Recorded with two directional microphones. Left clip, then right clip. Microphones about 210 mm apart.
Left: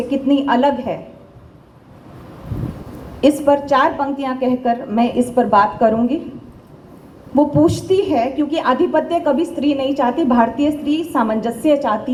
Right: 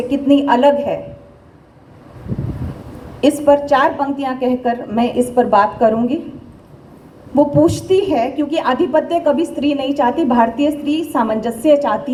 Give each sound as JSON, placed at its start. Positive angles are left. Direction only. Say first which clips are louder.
{"t": 0.1, "sound": "a woman's voice", "louder": "right 3 dB", "side_deg": -50}
{"t": 3.2, "sound": "a woman's voice", "louder": "right 2 dB", "side_deg": -55}
{"t": 7.3, "sound": "a woman's voice", "louder": "right 2 dB", "side_deg": -55}